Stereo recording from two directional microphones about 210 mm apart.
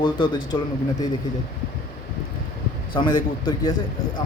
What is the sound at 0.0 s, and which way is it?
Speech, 20° left (ahead or behind).